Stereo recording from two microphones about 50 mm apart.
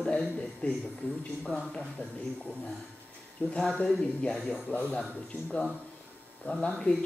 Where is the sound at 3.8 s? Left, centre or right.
Centre.